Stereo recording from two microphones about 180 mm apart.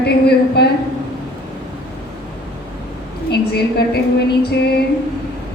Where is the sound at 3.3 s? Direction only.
65° left (ahead or behind).